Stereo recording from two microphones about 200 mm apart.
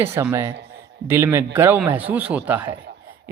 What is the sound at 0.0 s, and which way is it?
A man's voice, 15° right (ahead or behind).